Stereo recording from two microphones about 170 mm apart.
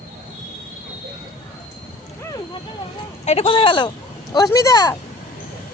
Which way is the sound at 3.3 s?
35° left (ahead or behind).